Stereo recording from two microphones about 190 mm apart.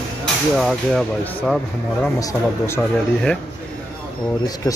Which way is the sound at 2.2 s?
15° left (ahead or behind).